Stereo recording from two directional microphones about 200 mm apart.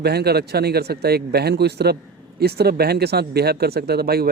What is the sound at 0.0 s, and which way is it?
Speech, 55° right (ahead or behind).